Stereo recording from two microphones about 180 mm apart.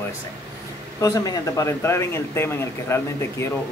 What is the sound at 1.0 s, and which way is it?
Speech, 20° left (ahead or behind).